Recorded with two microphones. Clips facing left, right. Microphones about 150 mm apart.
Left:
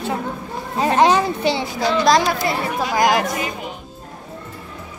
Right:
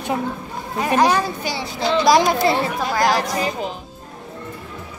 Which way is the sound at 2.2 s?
25° right (ahead or behind).